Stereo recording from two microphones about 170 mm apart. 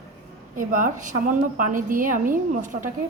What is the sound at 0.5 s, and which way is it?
A woman's voice, 50° right (ahead or behind).